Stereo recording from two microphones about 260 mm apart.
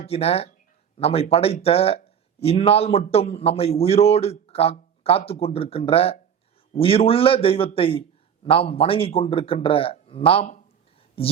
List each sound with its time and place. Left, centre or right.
0.0 s a man's voice: left